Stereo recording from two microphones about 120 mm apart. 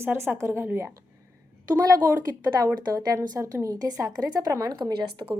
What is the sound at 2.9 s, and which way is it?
A woman's voice, 30° right (ahead or behind).